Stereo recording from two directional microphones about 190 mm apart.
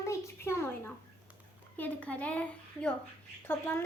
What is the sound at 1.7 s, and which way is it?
A child's voice, 10° left (ahead or behind).